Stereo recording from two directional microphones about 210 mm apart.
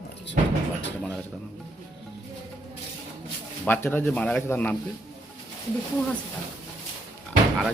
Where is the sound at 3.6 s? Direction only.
10° left (ahead or behind).